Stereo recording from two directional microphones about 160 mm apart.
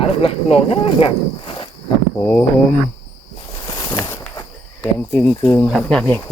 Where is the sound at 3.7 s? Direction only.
30° left (ahead or behind).